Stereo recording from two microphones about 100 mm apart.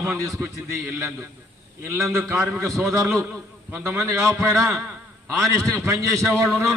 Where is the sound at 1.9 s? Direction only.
30° right (ahead or behind).